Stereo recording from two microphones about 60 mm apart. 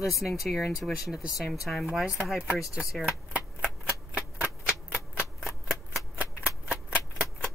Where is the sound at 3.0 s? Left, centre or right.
Right.